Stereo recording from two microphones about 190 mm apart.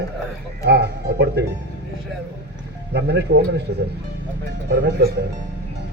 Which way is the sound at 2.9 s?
60° right (ahead or behind).